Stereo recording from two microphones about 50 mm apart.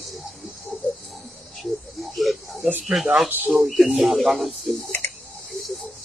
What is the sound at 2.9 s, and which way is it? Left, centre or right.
Speech, centre.